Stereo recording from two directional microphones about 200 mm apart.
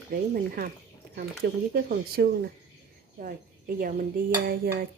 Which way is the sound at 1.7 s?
50° right (ahead or behind).